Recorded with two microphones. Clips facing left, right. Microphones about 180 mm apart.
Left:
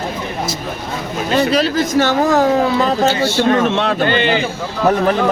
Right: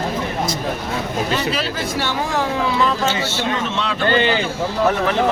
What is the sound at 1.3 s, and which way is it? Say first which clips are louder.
Speech: left 7 dB; 40° left (ahead or behind).